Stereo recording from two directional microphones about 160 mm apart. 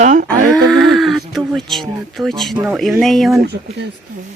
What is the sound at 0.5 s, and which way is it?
Speech, centre (ahead or behind).